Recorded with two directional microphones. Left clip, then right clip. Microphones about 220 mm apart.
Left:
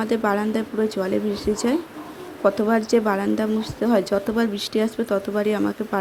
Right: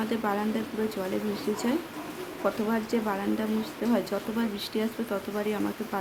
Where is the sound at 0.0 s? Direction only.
25° left (ahead or behind).